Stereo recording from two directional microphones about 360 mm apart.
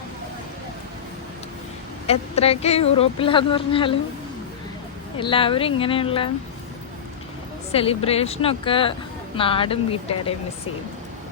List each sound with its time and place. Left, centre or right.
2.0 s speech: centre
5.1 s speech: centre
7.7 s speech: centre